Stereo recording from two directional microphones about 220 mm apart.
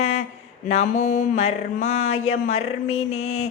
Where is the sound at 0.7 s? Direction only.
30° left (ahead or behind).